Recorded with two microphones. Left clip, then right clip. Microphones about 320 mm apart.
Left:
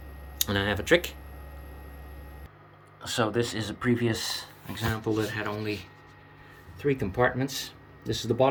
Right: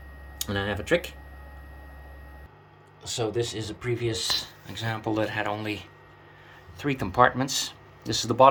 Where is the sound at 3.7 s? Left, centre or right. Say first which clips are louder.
Left 2 dB; centre.